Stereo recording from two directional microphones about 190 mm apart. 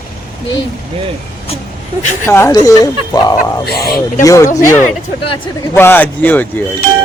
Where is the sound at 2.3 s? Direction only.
15° left (ahead or behind).